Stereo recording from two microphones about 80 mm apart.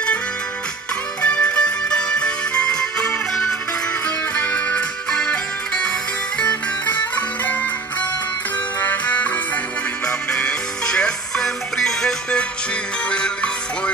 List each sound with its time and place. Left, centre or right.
1.2 s music: centre
6.9 s music: left
8.8 s music: centre